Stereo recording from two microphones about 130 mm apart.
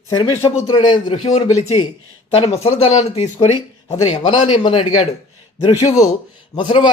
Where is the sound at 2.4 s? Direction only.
50° left (ahead or behind).